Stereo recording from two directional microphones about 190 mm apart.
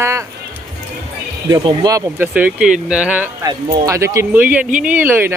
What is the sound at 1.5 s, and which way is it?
Speech, 25° right (ahead or behind).